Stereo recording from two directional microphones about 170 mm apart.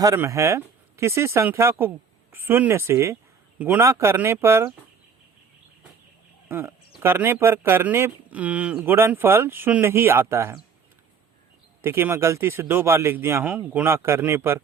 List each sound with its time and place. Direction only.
0.0 s speech: 20° right (ahead or behind)
6.5 s speech: 15° right (ahead or behind)
11.8 s speech: 15° right (ahead or behind)